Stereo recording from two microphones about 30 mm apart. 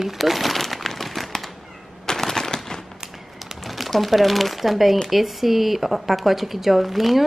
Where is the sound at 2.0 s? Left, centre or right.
Centre.